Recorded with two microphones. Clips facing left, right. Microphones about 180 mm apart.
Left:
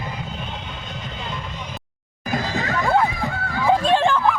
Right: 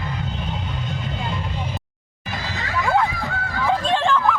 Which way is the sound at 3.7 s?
10° left (ahead or behind).